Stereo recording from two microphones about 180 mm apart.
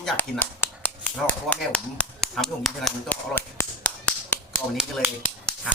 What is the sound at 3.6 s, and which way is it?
Tap, 15° left (ahead or behind).